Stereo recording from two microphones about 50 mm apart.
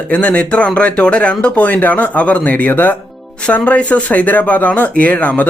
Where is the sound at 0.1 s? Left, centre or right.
Left.